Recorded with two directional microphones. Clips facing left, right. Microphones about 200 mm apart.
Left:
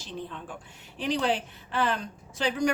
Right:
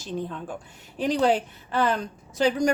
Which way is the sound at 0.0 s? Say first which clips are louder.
Right 6 dB; 45° right (ahead or behind).